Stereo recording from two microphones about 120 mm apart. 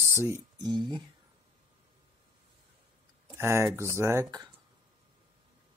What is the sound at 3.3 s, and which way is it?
Speech, 20° right (ahead or behind).